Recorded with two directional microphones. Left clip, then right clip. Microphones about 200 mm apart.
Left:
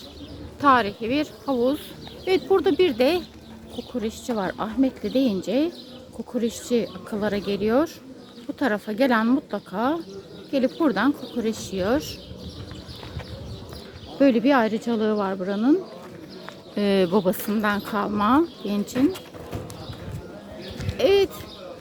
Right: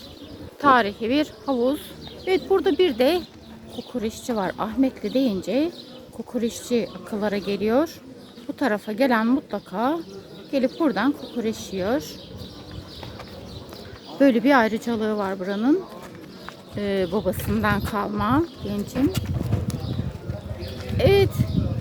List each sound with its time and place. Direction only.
0.6 s speech: 5° right (ahead or behind)
1.5 s speech: 5° left (ahead or behind)
14.2 s speech: 5° left (ahead or behind)
16.7 s speech: 25° left (ahead or behind)
17.5 s speech: 10° left (ahead or behind)
21.0 s a sound: 5° left (ahead or behind)